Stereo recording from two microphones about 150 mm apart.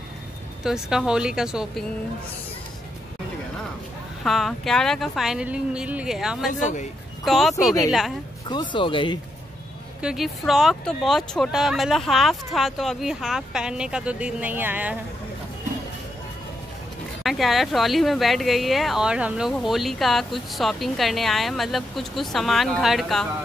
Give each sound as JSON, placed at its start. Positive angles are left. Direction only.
{"t": 0.7, "sound": "speech", "side_deg": -5}
{"t": 4.2, "sound": "speech", "side_deg": 0}
{"t": 6.6, "sound": "speech", "side_deg": 55}
{"t": 7.2, "sound": "speech", "side_deg": 0}
{"t": 7.5, "sound": "speech", "side_deg": 25}
{"t": 10.0, "sound": "speech", "side_deg": 0}
{"t": 17.2, "sound": "speech", "side_deg": 0}